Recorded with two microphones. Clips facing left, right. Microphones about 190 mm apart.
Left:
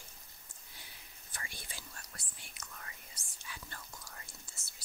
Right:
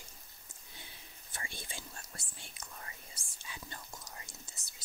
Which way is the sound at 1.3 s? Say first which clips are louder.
Right 3 dB; 25° right (ahead or behind).